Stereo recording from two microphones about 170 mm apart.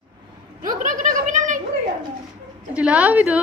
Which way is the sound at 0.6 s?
50° right (ahead or behind).